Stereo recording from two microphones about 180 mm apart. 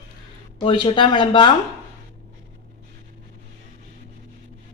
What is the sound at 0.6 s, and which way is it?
Speech, 25° left (ahead or behind).